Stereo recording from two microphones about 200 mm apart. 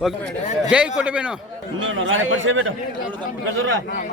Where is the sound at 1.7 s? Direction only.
75° right (ahead or behind).